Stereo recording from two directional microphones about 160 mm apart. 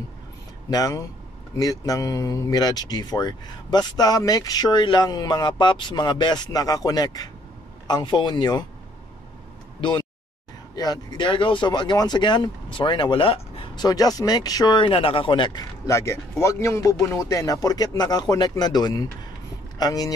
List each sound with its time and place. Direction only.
0.7 s speech: 25° left (ahead or behind)
9.8 s speech: 30° left (ahead or behind)
15.9 s speech: 20° left (ahead or behind)